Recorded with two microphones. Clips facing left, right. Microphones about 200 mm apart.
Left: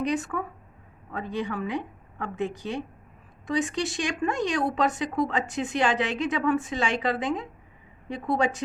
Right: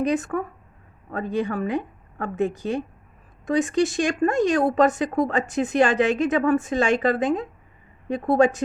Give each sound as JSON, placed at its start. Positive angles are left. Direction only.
{"t": 0.0, "sound": "speech", "side_deg": -50}